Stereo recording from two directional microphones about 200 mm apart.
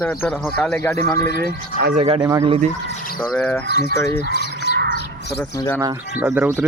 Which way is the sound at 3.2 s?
10° left (ahead or behind).